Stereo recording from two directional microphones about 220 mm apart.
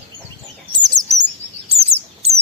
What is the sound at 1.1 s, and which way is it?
Chirp, centre (ahead or behind).